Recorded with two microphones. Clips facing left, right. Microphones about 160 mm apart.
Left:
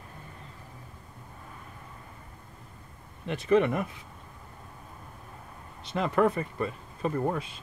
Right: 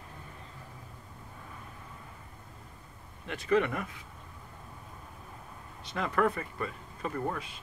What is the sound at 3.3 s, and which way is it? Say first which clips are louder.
Speech: left 4 dB; 25° left (ahead or behind).